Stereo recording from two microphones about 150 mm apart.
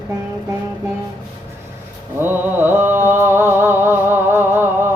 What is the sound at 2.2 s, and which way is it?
Mantra, 15° right (ahead or behind).